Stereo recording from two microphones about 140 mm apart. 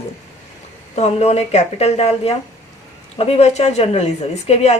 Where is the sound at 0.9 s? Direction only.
50° left (ahead or behind).